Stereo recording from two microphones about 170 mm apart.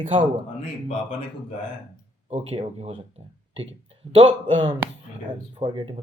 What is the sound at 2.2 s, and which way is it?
Speech, 35° right (ahead or behind).